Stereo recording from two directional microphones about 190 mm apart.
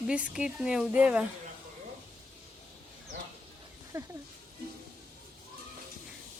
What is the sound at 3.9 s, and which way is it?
Speech, 20° right (ahead or behind).